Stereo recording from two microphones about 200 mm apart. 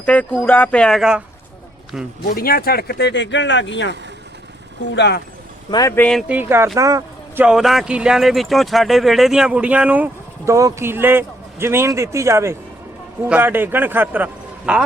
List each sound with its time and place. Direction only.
0.0 s speech: 5° left (ahead or behind)
2.2 s speech: 45° left (ahead or behind); by 3.9 s 65° left (ahead or behind)
4.9 s speech: 55° left (ahead or behind)
5.7 s speech: 15° left (ahead or behind)
6.2 s speech: 10° right (ahead or behind)
7.4 s speech: centre (ahead or behind)